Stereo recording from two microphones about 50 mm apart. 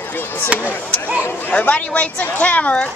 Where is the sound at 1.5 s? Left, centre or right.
Left.